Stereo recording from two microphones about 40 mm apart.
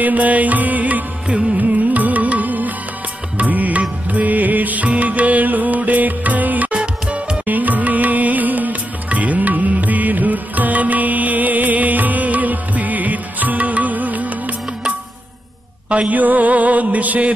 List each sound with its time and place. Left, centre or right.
0.0 s music: right
6.7 s music: right
7.4 s music: right
15.9 s music: right
16.2 s music: right